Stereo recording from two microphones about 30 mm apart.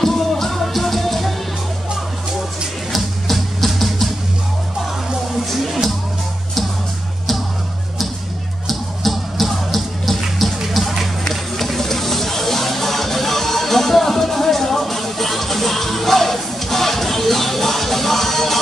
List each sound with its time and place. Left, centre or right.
0.0 s music: centre
2.9 s music: centre
5.5 s music: centre
8.6 s music: centre